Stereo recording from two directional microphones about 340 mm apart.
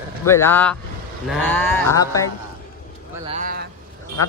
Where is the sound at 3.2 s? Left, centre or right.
Right.